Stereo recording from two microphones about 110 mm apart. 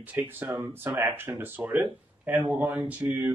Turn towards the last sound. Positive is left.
turn(degrees=-15)  # may be behind; listen again after turning